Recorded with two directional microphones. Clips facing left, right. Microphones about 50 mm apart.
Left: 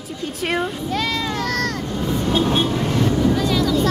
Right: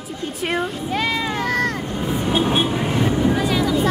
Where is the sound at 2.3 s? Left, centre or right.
Right.